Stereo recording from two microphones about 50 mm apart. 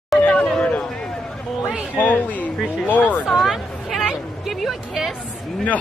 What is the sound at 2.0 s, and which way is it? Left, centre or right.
A woman's voice, left.